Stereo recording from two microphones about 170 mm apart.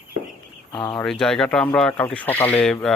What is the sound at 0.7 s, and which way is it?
Speech, 25° left (ahead or behind).